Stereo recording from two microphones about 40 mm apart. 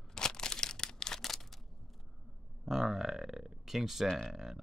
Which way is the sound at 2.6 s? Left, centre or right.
Centre.